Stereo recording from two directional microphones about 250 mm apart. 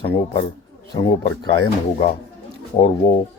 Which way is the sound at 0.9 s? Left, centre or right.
Centre.